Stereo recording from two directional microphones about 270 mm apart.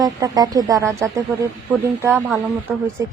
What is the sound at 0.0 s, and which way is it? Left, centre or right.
Speech, centre.